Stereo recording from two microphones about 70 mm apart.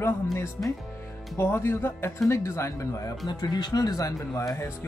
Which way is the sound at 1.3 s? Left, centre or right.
Left.